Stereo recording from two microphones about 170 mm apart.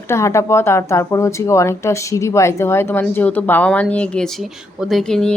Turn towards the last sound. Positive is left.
turn(degrees=5)  # may be behind; listen again after turning